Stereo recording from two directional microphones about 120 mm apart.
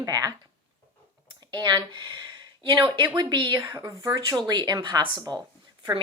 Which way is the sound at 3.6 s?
30° right (ahead or behind).